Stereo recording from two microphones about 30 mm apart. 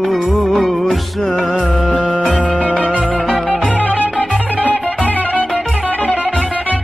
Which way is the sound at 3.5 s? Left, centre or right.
Left.